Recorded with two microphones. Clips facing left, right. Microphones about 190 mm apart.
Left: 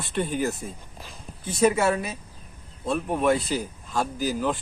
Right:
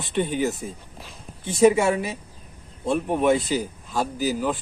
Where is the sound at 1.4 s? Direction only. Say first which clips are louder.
Right 4 dB; 25° right (ahead or behind).